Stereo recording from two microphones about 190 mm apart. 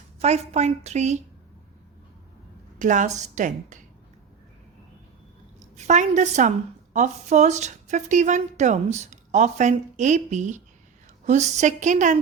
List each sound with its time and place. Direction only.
0.2 s speech: 35° right (ahead or behind)
2.7 s speech: 40° right (ahead or behind)
5.5 s a woman's voice: 35° right (ahead or behind)